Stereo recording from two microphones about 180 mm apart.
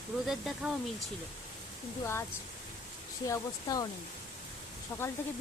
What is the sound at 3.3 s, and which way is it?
Speech, 20° left (ahead or behind).